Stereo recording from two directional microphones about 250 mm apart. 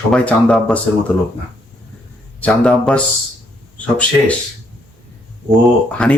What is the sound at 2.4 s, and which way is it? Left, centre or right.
Speech, centre.